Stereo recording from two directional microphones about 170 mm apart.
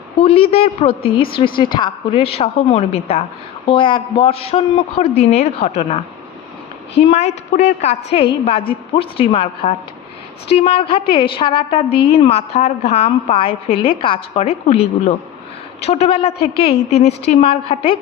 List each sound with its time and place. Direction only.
0.2 s a woman's voice: 35° left (ahead or behind)